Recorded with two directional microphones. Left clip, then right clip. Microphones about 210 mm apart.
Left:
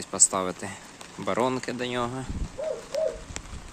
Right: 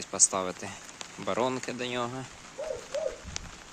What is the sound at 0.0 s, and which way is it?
Speech, centre (ahead or behind).